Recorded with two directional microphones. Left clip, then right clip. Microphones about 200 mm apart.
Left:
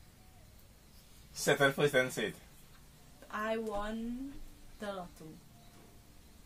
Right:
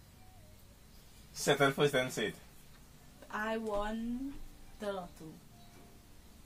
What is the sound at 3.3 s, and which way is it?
Speech, 15° left (ahead or behind).